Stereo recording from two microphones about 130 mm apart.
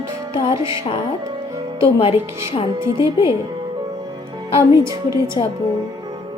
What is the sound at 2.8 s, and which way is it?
Speech, 20° right (ahead or behind).